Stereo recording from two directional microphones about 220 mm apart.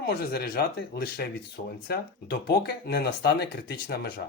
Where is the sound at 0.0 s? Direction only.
45° left (ahead or behind).